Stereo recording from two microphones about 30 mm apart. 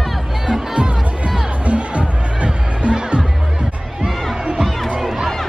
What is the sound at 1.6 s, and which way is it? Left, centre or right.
Music, right.